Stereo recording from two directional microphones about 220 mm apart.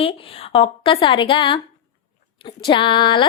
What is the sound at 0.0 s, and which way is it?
A woman's voice, 25° left (ahead or behind).